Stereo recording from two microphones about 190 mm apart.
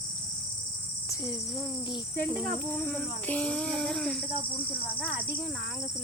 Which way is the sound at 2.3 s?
10° left (ahead or behind).